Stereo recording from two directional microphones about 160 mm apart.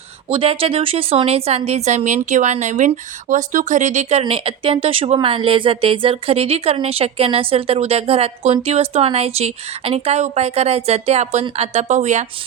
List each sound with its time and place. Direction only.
0.3 s speech: 35° right (ahead or behind)
4.2 s a woman's voice: 35° right (ahead or behind)